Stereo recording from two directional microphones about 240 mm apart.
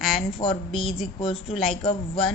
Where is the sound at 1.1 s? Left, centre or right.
Left.